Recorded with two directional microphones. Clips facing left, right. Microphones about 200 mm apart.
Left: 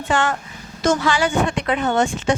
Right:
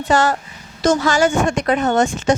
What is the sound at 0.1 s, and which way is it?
Speech, 40° right (ahead or behind).